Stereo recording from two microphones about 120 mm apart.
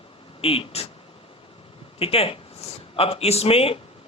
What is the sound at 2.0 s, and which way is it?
A man's voice, 55° left (ahead or behind).